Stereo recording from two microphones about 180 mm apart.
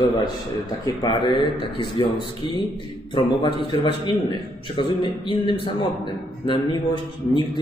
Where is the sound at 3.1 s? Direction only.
25° left (ahead or behind).